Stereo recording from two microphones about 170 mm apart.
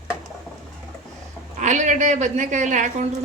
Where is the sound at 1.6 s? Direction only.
45° right (ahead or behind).